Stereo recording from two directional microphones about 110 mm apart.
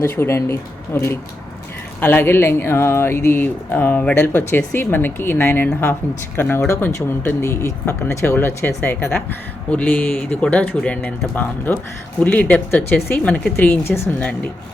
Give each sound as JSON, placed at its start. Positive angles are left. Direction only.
{"t": 0.0, "sound": "speech", "side_deg": 25}